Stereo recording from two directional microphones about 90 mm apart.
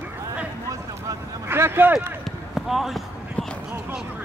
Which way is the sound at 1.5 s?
25° right (ahead or behind).